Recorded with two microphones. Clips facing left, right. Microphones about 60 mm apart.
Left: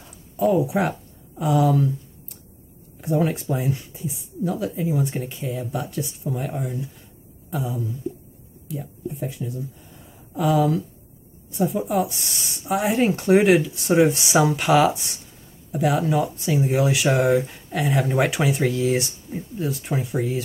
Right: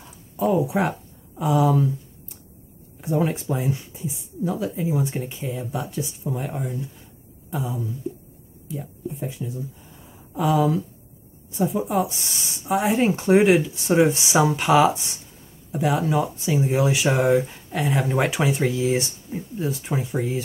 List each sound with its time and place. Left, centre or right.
0.4 s speech: centre
3.0 s speech: centre